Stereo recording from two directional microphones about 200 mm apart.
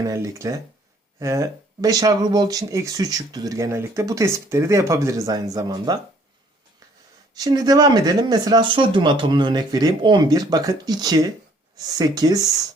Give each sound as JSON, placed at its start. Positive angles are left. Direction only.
{"t": 0.0, "sound": "speech", "side_deg": -15}
{"t": 7.3, "sound": "speech", "side_deg": -20}